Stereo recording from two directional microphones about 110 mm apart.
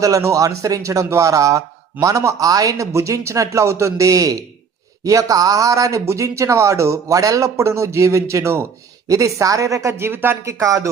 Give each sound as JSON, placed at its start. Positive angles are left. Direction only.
{"t": 0.0, "sound": "a man's voice", "side_deg": -30}